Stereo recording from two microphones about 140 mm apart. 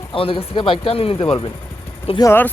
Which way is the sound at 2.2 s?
15° left (ahead or behind).